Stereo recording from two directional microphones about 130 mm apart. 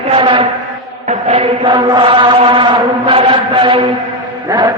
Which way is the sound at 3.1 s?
40° right (ahead or behind).